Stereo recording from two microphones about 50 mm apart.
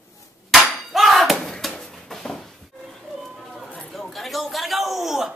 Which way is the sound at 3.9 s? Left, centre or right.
Centre.